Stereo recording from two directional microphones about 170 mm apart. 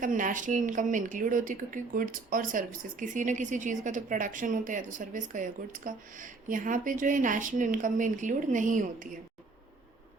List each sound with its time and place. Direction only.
0.0 s a woman's voice: 50° right (ahead or behind)